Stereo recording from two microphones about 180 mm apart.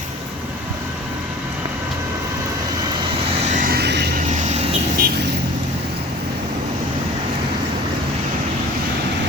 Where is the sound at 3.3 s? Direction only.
40° right (ahead or behind); by 4.1 s 70° right (ahead or behind).